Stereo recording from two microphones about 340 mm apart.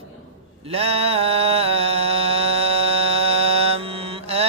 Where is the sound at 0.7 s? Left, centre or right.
Centre.